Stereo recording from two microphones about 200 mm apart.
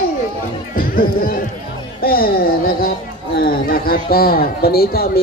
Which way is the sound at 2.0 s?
50° left (ahead or behind).